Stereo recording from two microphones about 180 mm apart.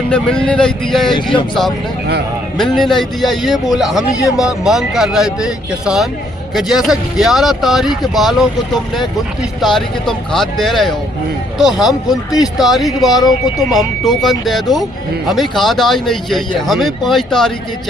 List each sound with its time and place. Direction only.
0.1 s speech: 5° left (ahead or behind)
1.1 s speech: 30° left (ahead or behind)
2.6 s speech: centre (ahead or behind)